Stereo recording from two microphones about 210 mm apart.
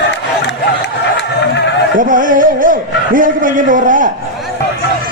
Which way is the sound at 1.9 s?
40° right (ahead or behind).